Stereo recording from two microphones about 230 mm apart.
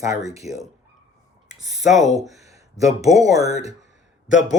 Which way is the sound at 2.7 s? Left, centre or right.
Left.